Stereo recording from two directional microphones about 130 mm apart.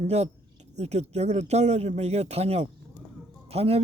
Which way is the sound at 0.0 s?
55° right (ahead or behind).